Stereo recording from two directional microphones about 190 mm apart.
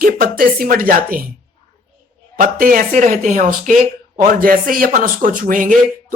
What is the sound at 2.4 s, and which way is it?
Speech, 45° right (ahead or behind).